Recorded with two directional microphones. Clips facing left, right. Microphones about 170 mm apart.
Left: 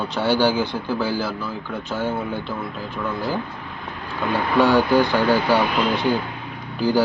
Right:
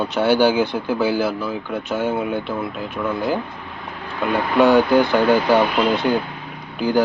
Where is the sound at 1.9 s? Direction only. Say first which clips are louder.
Right 3 dB; 20° right (ahead or behind).